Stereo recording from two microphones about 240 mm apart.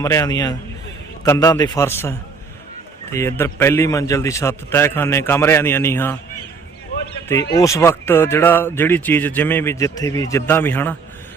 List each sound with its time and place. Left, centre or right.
0.0 s speech: centre
7.5 s speech: centre